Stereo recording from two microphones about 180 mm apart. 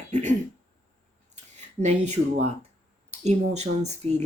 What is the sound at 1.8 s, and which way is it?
Speech, 40° right (ahead or behind).